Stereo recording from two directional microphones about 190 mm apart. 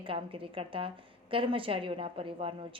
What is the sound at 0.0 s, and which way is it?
A woman's voice, 30° right (ahead or behind).